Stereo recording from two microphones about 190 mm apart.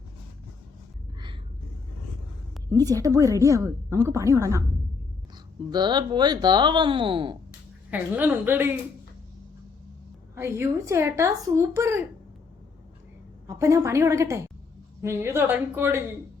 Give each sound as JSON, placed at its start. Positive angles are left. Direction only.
{"t": 2.7, "sound": "speech", "side_deg": -20}
{"t": 5.7, "sound": "speech", "side_deg": -20}
{"t": 7.9, "sound": "speech", "side_deg": -10}
{"t": 10.3, "sound": "speech", "side_deg": -15}
{"t": 13.5, "sound": "speech", "side_deg": -15}